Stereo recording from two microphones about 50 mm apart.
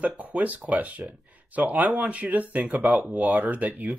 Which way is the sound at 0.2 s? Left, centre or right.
Right.